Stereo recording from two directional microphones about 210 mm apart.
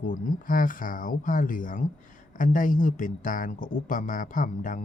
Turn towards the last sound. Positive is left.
turn(degrees=40)  # may be behind; listen again after turning